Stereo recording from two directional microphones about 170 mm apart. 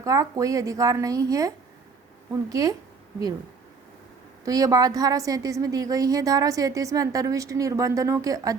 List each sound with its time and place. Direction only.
0.0 s a woman's voice: 20° right (ahead or behind)
4.4 s a woman's voice: 20° right (ahead or behind)